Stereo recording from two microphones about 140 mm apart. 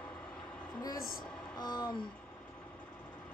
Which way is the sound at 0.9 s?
90° left.